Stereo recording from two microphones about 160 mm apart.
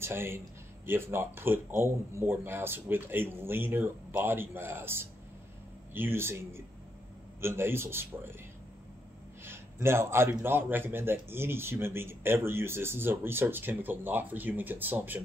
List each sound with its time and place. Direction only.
0.0 s a man's voice: 15° right (ahead or behind)
9.4 s a man's voice: 15° right (ahead or behind)